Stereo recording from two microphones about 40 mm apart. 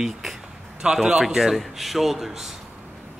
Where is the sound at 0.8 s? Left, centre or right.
Right.